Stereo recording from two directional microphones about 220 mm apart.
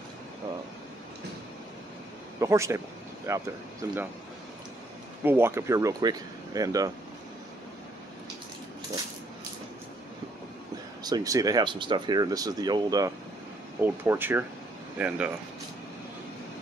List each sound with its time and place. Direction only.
2.4 s speech: 15° right (ahead or behind)
5.2 s speech: 10° right (ahead or behind)
11.1 s speech: 15° right (ahead or behind)